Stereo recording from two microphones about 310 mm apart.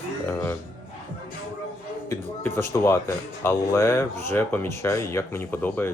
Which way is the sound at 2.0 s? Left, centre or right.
Centre.